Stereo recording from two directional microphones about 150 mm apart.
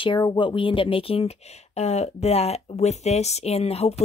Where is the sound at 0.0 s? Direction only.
30° left (ahead or behind).